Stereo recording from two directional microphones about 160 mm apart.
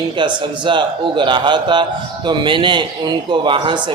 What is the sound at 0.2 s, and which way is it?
A man's voice, 30° right (ahead or behind).